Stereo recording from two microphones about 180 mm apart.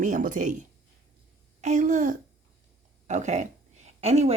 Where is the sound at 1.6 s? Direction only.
40° right (ahead or behind).